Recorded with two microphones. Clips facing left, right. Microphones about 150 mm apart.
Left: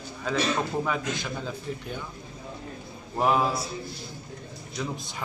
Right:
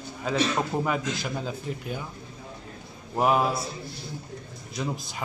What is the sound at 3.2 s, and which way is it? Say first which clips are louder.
Speech: right 1 dB; 5° right (ahead or behind).